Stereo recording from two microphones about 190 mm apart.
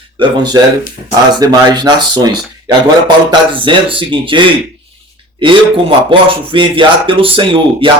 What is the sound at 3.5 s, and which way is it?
Speech, 25° right (ahead or behind).